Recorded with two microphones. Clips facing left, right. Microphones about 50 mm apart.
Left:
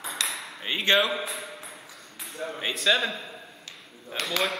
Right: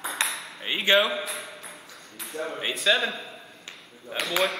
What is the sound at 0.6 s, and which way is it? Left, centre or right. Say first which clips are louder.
Speech: right 1 dB; centre.